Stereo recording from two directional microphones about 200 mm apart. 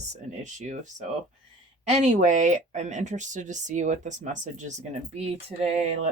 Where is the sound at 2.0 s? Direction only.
35° right (ahead or behind).